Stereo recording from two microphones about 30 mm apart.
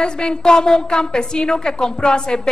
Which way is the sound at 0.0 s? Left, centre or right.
Left.